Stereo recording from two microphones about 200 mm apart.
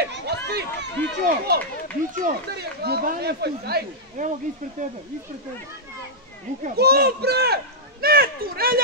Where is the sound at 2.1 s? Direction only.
45° right (ahead or behind).